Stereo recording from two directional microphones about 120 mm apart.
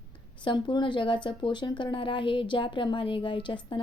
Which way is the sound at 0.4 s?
40° left (ahead or behind).